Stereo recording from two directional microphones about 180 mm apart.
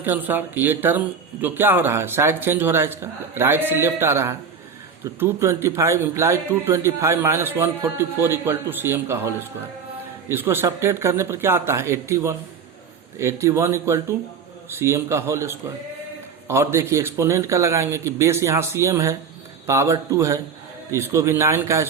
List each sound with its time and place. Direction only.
0.0 s speech: 10° right (ahead or behind)
10.3 s speech: 10° right (ahead or behind)